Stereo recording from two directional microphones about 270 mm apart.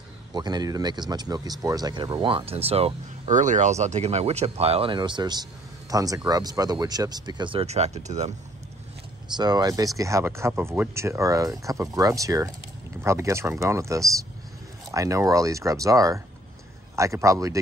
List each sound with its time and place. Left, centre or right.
0.3 s speech: centre
9.4 s speech: centre